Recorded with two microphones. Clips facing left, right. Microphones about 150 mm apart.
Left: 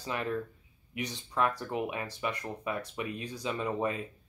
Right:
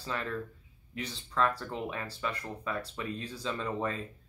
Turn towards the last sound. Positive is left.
turn(degrees=15)  # may be behind; listen again after turning